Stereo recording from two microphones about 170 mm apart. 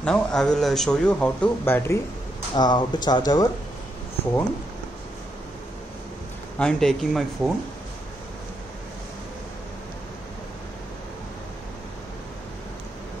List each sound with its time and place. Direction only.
0.0 s a man's voice: 5° left (ahead or behind)
2.5 s speech: 25° left (ahead or behind)
6.6 s a man's voice: centre (ahead or behind)